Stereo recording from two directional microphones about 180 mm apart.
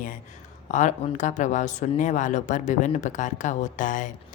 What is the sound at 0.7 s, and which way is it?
Speech, 40° left (ahead or behind).